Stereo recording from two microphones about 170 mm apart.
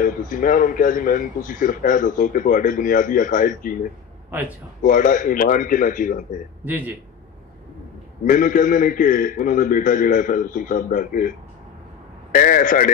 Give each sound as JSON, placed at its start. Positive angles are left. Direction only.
{"t": 0.0, "sound": "a man's voice", "side_deg": 55}
{"t": 4.8, "sound": "a man's voice", "side_deg": 50}
{"t": 6.6, "sound": "a man's voice", "side_deg": -10}
{"t": 8.3, "sound": "a man's voice", "side_deg": 50}